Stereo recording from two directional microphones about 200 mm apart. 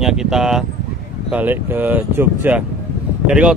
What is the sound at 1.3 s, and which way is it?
Speech, 10° right (ahead or behind).